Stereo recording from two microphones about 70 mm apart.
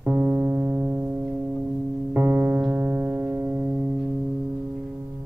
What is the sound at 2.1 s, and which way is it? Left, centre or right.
Music, right.